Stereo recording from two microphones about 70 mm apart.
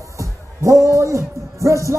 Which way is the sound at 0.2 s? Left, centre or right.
Right.